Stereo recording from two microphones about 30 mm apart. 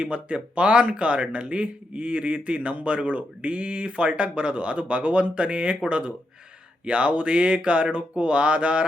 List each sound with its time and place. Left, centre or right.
0.0 s speech: right